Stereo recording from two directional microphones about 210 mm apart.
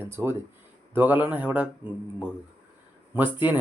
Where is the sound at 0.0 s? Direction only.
10° right (ahead or behind).